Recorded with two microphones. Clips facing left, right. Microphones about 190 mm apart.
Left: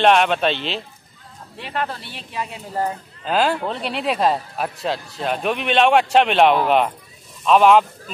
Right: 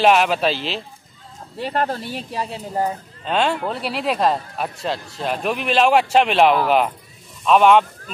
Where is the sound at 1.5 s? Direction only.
40° right (ahead or behind).